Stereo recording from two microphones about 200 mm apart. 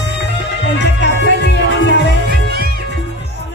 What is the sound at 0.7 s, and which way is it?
Music, 60° left (ahead or behind).